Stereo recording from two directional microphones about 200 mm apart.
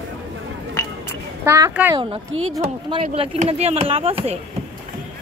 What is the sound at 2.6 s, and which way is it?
Speech, 30° right (ahead or behind).